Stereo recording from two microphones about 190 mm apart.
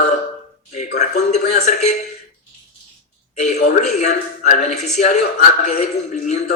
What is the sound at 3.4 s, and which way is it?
A man's voice, 35° left (ahead or behind).